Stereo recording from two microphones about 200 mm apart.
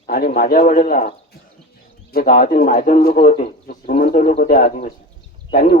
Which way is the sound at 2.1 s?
45° left (ahead or behind).